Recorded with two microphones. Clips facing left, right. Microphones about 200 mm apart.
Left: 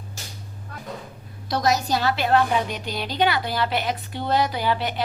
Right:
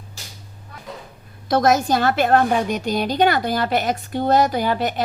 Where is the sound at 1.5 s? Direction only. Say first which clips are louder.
Right 5 dB; 50° right (ahead or behind).